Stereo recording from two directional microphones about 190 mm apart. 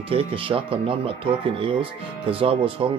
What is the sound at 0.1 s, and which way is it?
Speech, 30° right (ahead or behind).